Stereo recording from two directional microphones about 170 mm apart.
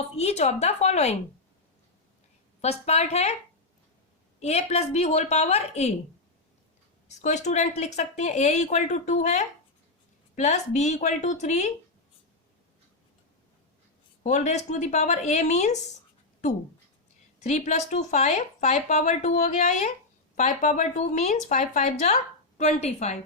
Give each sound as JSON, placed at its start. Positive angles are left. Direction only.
{"t": 0.2, "sound": "a woman's voice", "side_deg": 40}
{"t": 2.6, "sound": "a woman's voice", "side_deg": 40}
{"t": 4.4, "sound": "a woman's voice", "side_deg": 40}
{"t": 7.2, "sound": "speech", "side_deg": 45}
{"t": 14.3, "sound": "speech", "side_deg": 45}
{"t": 17.4, "sound": "speech", "side_deg": 45}